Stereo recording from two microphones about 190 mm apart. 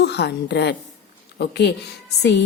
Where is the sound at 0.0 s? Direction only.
60° left (ahead or behind).